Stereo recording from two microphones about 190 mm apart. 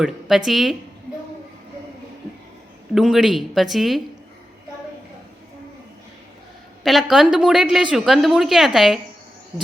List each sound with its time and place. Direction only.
0.0 s a woman's voice: centre (ahead or behind)
2.9 s a woman's voice: centre (ahead or behind)
6.8 s a woman's voice: centre (ahead or behind)